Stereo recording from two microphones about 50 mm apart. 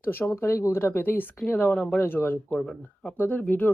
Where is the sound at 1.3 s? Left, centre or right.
Centre.